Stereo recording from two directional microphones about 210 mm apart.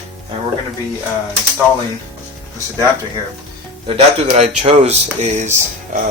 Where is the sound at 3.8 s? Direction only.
30° right (ahead or behind).